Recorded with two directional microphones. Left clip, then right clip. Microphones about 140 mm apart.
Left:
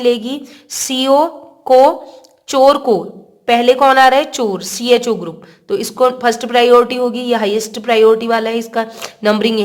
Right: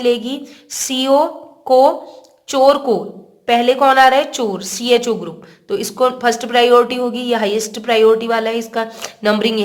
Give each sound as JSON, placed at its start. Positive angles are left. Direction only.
{"t": 0.0, "sound": "a woman's voice", "side_deg": 30}